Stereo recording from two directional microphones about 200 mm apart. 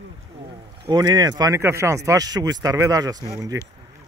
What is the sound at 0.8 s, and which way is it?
Speech, 20° right (ahead or behind).